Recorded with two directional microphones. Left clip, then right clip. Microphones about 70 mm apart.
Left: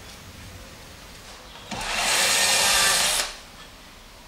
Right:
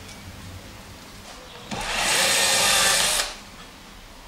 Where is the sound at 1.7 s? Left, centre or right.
Centre.